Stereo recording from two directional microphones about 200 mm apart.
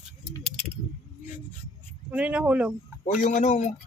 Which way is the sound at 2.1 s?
5° right (ahead or behind).